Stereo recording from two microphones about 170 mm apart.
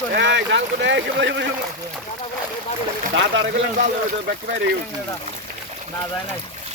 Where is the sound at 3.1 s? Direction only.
90° right.